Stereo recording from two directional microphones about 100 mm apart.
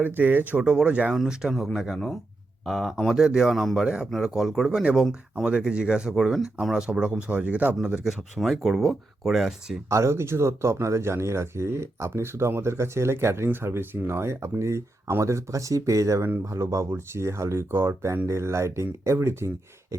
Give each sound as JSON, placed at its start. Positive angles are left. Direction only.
{"t": 0.0, "sound": "speech", "side_deg": -20}
{"t": 9.9, "sound": "speech", "side_deg": -30}